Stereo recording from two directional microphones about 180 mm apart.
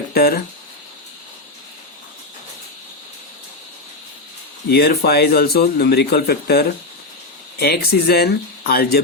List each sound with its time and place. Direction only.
0.1 s speech: 60° left (ahead or behind)
4.7 s speech: 60° left (ahead or behind)